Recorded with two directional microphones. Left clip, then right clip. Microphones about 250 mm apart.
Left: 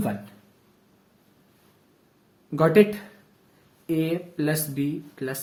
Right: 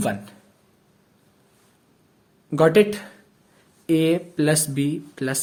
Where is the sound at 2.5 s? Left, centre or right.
Right.